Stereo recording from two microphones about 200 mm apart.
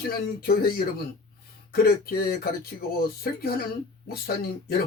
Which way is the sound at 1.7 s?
50° left (ahead or behind).